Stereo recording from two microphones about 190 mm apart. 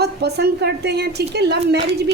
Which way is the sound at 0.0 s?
60° right (ahead or behind).